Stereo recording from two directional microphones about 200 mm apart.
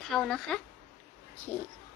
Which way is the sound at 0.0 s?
Centre (ahead or behind).